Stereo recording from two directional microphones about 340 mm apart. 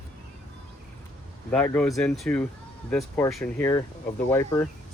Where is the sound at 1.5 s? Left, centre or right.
Centre.